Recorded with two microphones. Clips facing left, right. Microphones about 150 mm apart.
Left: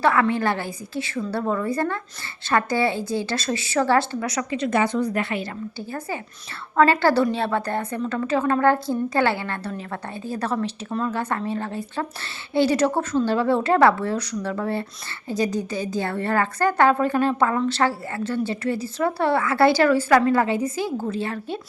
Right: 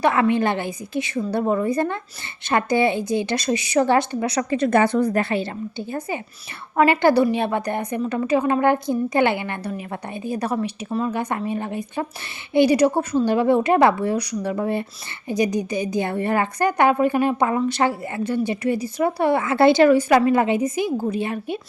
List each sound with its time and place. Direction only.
0.0 s a woman's voice: 20° right (ahead or behind)
4.5 s a woman's voice: 50° right (ahead or behind)
5.2 s a woman's voice: 30° right (ahead or behind)
6.7 s a woman's voice: 15° right (ahead or behind)